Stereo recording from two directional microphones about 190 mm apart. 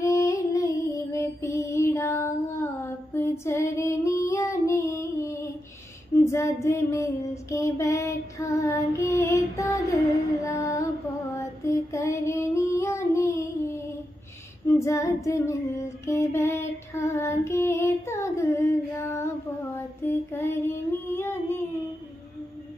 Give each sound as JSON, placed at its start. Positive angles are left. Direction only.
{"t": 0.0, "sound": "music", "side_deg": 15}
{"t": 6.3, "sound": "female singing", "side_deg": 15}
{"t": 10.4, "sound": "music", "side_deg": 15}
{"t": 14.7, "sound": "female singing", "side_deg": 15}
{"t": 21.1, "sound": "child singing", "side_deg": 10}